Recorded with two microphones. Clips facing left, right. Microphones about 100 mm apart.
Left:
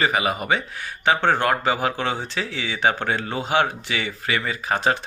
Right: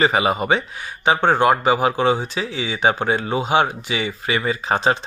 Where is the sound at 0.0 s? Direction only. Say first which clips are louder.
Right 4 dB; 25° right (ahead or behind).